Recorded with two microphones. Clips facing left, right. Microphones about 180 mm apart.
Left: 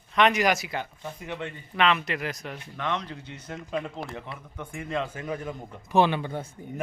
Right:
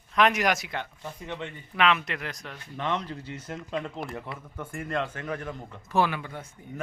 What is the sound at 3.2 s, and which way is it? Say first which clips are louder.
Speech: right 2 dB; 5° right (ahead or behind).